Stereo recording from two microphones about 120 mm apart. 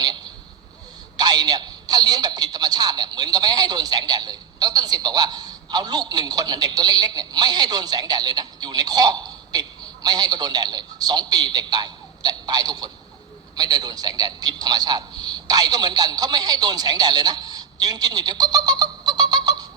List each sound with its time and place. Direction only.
1.1 s a man's voice: 35° right (ahead or behind)